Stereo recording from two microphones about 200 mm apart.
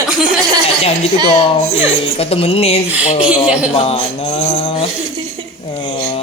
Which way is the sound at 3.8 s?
30° left (ahead or behind).